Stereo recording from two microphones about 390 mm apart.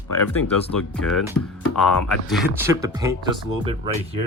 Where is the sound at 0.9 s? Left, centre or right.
Centre.